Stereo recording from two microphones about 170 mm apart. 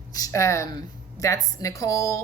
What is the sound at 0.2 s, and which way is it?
A woman's voice, 15° left (ahead or behind).